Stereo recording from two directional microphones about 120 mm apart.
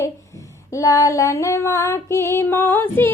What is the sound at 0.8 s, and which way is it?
Female singing, 25° left (ahead or behind).